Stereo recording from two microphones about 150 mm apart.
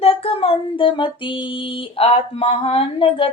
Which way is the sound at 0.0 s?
40° left (ahead or behind).